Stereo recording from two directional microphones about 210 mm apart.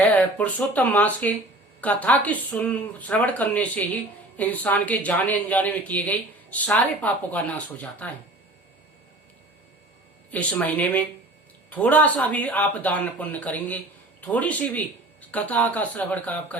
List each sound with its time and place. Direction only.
0.1 s speech: 5° left (ahead or behind)
10.3 s speech: 5° left (ahead or behind)